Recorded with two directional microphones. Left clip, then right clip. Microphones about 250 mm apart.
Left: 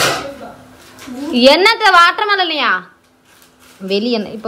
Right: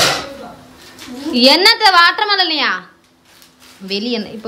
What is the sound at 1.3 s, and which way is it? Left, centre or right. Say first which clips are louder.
Speech: left 1 dB; centre.